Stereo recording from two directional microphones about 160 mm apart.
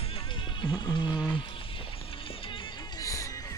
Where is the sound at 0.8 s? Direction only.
30° left (ahead or behind).